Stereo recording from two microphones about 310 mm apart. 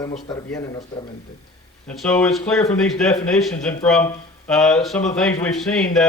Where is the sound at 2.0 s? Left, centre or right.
Centre.